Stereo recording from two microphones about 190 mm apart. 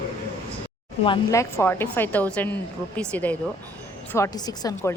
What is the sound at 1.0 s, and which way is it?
A woman's voice, 20° left (ahead or behind).